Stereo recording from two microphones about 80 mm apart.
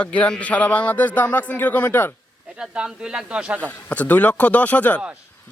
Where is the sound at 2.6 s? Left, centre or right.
Centre.